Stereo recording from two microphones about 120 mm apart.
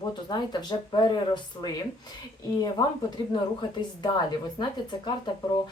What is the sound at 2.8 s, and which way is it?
Speech, 30° left (ahead or behind).